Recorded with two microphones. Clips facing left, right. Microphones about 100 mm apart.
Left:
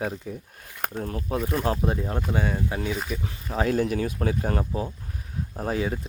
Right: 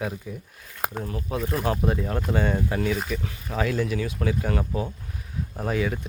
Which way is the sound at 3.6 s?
45° left (ahead or behind).